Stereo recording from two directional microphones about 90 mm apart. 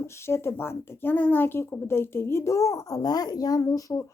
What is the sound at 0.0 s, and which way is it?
Speech, 30° left (ahead or behind).